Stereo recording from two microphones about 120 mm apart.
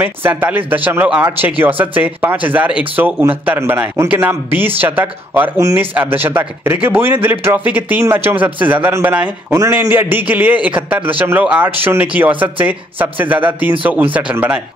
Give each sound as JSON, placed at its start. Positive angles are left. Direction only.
{"t": 0.0, "sound": "speech", "side_deg": -15}